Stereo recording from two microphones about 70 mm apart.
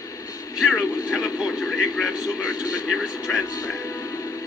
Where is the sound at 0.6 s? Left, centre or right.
Centre.